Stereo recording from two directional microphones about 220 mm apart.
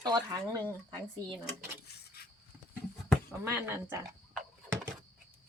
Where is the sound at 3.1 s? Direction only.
10° right (ahead or behind).